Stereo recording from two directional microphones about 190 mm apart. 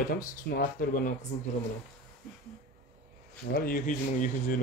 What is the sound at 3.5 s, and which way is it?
Speech, 50° left (ahead or behind).